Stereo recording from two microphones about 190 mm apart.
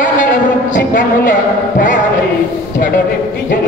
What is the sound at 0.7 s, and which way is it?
Speech, 45° left (ahead or behind).